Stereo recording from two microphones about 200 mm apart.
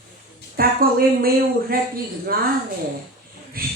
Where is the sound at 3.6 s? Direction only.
45° right (ahead or behind).